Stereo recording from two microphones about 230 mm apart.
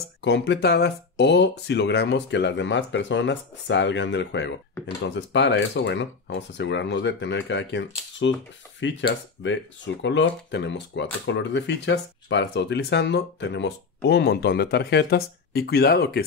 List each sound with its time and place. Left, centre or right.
0.2 s speech: left